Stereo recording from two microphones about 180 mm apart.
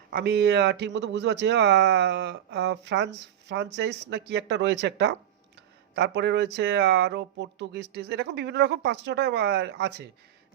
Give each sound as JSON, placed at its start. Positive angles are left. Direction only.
{"t": 0.1, "sound": "speech", "side_deg": -65}